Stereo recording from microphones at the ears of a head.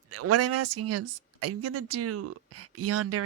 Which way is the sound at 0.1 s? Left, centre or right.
Right.